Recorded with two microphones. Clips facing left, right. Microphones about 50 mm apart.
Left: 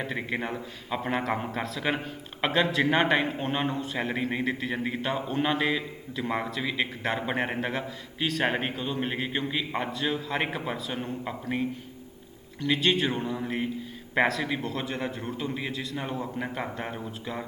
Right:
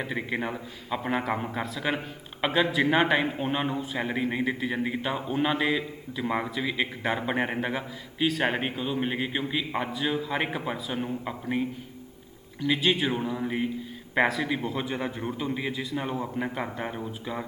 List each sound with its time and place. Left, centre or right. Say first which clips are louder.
0.0 s a man's voice: right 1 dB; centre
16.6 s a man's voice: right 1 dB; centre